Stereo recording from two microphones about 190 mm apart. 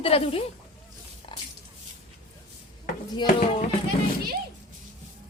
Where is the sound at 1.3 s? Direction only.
25° left (ahead or behind).